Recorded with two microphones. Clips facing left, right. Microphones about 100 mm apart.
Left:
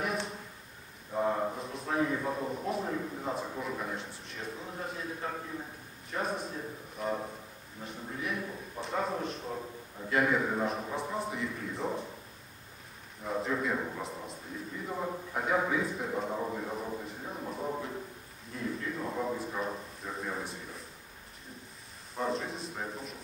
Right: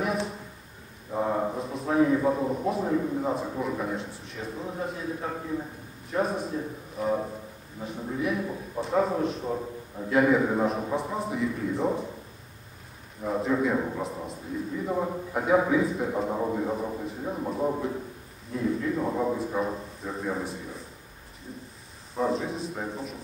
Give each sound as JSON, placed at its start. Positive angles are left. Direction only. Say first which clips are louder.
{"t": 0.0, "sound": "a sound", "louder": "right 5 dB", "side_deg": 0}
{"t": 2.6, "sound": "a man's voice", "louder": "right 7 dB", "side_deg": -5}
{"t": 13.2, "sound": "a man's voice", "louder": "right 7 dB", "side_deg": 0}
{"t": 16.3, "sound": "a man's voice", "louder": "right 7 dB", "side_deg": -15}
{"t": 17.4, "sound": "a man's voice", "louder": "right 8 dB", "side_deg": -30}
{"t": 18.5, "sound": "a man's voice", "louder": "right 9 dB", "side_deg": 0}
{"t": 22.1, "sound": "a man's voice", "louder": "right 6 dB", "side_deg": 0}